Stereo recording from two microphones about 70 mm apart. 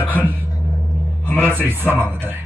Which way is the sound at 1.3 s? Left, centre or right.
Right.